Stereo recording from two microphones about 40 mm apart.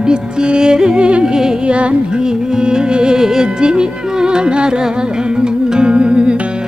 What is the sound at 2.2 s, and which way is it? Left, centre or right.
Speech, centre.